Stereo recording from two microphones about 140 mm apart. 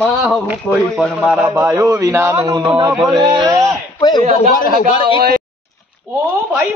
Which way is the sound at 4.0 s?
30° left (ahead or behind).